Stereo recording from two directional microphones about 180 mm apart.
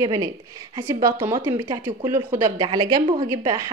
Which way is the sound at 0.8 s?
15° right (ahead or behind).